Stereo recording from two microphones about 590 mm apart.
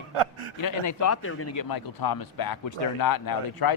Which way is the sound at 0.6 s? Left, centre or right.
Left.